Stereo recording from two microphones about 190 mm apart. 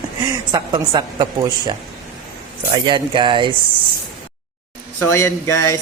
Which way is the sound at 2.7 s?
25° right (ahead or behind).